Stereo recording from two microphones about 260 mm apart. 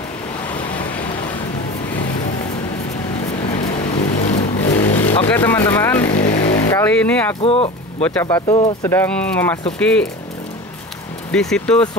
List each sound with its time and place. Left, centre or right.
3.4 s vehicle: left
4.7 s vehicle: centre
6.0 s vehicle: left
6.7 s speech: centre
7.4 s speech: left
8.0 s speech: centre
8.5 s speech: left
8.8 s speech: centre
11.3 s speech: centre